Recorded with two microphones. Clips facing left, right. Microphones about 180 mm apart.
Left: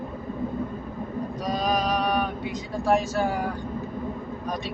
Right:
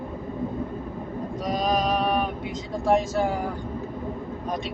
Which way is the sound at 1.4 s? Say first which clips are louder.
Right 1 dB; 25° right (ahead or behind).